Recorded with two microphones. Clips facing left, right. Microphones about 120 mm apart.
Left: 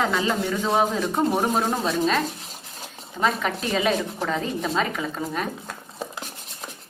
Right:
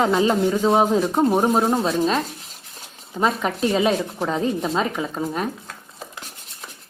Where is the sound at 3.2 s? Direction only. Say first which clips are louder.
Right 3 dB; 25° right (ahead or behind).